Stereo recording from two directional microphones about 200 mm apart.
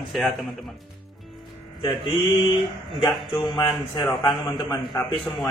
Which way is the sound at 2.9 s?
20° left (ahead or behind).